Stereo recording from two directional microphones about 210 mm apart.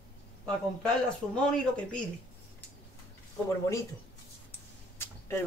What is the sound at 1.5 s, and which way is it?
Speech, 5° left (ahead or behind).